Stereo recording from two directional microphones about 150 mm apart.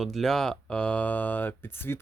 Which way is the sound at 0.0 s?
Centre (ahead or behind).